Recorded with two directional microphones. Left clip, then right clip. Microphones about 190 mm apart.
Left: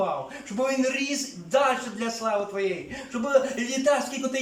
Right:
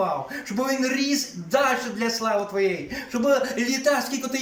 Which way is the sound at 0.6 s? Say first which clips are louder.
Right 1 dB; centre (ahead or behind).